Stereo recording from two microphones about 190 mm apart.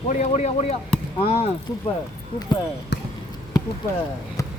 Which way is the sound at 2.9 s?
65° left (ahead or behind).